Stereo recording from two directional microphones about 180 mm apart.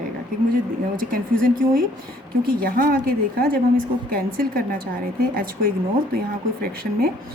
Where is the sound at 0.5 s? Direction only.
50° right (ahead or behind).